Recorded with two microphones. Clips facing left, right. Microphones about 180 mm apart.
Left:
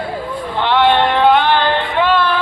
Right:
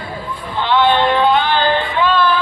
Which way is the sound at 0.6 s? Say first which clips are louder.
Left 1 dB; 60° left (ahead or behind).